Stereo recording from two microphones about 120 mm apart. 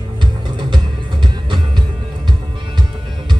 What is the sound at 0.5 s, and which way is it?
Music, 40° right (ahead or behind).